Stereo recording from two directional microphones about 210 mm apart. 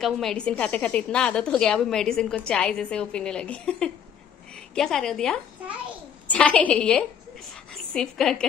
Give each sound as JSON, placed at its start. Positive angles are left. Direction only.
{"t": 0.0, "sound": "a woman's voice", "side_deg": 0}